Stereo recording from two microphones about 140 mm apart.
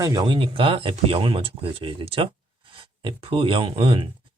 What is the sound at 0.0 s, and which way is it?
Speech, 25° right (ahead or behind).